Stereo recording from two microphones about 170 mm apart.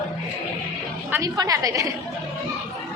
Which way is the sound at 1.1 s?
20° right (ahead or behind).